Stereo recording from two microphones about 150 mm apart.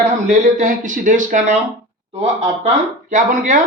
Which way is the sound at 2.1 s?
45° right (ahead or behind).